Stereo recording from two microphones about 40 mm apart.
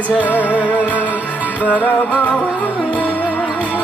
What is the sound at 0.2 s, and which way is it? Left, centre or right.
Music, left.